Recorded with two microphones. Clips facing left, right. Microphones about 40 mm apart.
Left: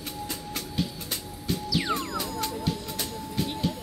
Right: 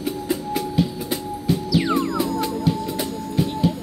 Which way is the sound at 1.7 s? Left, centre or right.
Centre.